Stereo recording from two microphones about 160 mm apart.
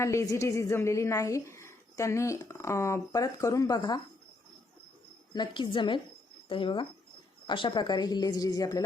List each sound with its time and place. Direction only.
0.0 s a woman's voice: 20° left (ahead or behind)
5.3 s a woman's voice: 25° left (ahead or behind)